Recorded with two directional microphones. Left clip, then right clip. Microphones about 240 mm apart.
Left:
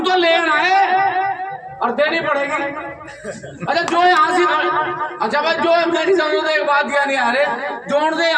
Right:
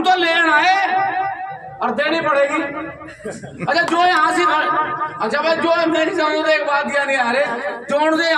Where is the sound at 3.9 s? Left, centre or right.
Centre.